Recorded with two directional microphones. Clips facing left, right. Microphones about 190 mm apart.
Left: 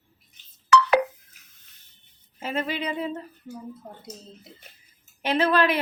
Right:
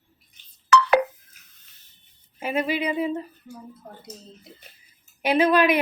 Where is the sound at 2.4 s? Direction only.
10° right (ahead or behind).